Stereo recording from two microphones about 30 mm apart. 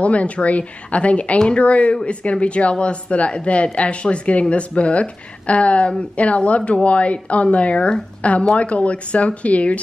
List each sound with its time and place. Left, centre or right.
0.0 s a woman's voice: left